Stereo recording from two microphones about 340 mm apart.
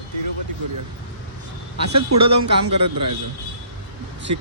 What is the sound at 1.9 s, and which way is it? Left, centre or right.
Speech, right.